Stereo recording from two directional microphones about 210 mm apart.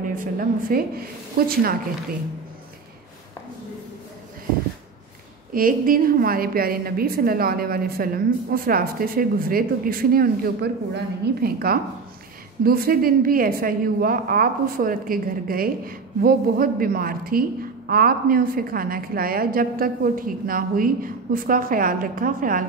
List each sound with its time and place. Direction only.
0.2 s a woman's voice: 45° right (ahead or behind)
5.5 s a woman's voice: 45° right (ahead or behind)